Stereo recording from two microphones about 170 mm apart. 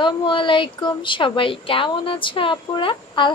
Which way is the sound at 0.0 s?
30° left (ahead or behind).